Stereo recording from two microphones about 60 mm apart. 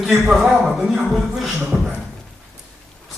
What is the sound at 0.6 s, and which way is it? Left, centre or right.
Speech, centre.